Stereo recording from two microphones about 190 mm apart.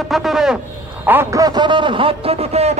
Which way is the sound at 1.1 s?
15° right (ahead or behind).